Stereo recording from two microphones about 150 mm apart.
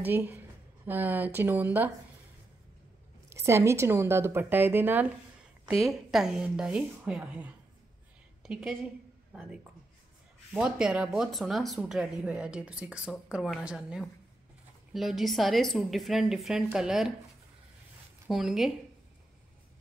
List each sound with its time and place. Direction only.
0.0 s speech: 15° right (ahead or behind)
3.3 s speech: 20° right (ahead or behind)
5.8 s a woman's voice: centre (ahead or behind)
18.3 s a woman's voice: centre (ahead or behind)